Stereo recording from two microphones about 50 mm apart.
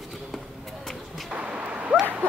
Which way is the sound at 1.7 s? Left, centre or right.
Right.